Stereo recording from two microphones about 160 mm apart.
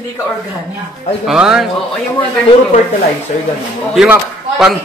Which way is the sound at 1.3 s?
5° right (ahead or behind).